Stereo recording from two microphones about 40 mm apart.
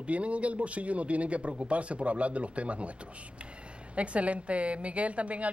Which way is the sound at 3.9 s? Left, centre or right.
Right.